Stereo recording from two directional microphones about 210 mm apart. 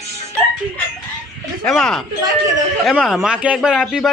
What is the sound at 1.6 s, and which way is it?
Speech, 5° left (ahead or behind).